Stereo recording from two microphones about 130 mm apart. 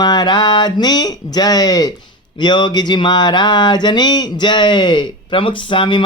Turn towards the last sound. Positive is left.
turn(degrees=40)  # may be behind; listen again after turning